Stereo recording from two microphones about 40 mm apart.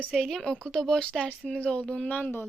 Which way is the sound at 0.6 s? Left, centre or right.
Centre.